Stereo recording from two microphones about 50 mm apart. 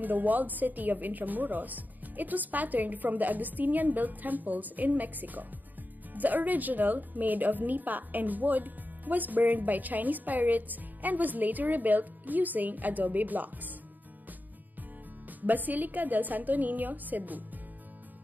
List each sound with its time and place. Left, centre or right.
0.0 s a woman's voice: right
15.4 s a woman's voice: right